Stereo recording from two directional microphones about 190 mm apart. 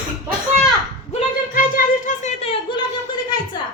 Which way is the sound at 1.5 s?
45° left (ahead or behind).